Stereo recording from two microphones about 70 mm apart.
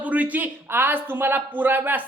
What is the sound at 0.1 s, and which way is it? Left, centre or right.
Speech, right.